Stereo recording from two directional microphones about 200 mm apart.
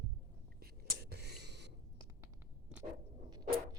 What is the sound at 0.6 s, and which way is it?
Whispering, 55° right (ahead or behind).